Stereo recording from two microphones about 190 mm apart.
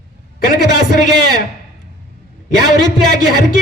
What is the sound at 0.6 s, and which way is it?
Speech, 60° right (ahead or behind).